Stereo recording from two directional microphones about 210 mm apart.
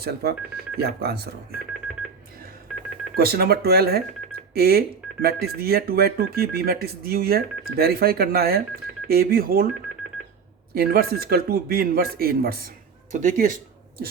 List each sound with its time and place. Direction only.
0.0 s speech: 50° right (ahead or behind)
3.2 s speech: 50° right (ahead or behind)
10.8 s speech: 45° right (ahead or behind)